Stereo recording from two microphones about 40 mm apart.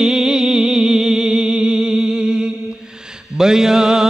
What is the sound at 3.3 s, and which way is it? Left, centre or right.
Mantra, centre.